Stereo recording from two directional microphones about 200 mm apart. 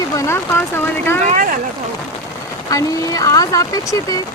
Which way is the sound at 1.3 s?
40° right (ahead or behind).